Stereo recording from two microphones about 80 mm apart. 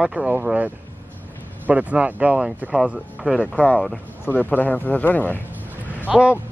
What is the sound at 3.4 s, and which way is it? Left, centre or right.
A man's voice, centre.